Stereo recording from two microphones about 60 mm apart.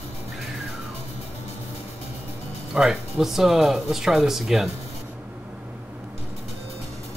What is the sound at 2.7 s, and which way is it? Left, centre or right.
Speech, centre.